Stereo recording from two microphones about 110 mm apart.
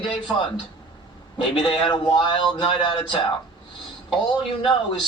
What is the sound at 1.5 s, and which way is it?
A man's voice, 50° left (ahead or behind).